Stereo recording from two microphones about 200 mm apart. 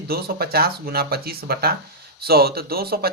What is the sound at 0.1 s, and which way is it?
Speech, 50° right (ahead or behind).